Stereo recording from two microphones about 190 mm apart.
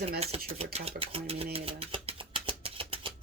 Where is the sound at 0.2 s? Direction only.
30° right (ahead or behind).